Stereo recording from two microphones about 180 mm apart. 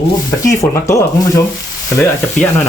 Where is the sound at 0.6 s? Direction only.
15° left (ahead or behind).